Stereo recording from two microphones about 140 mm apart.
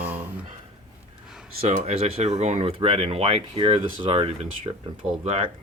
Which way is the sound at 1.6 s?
50° right (ahead or behind).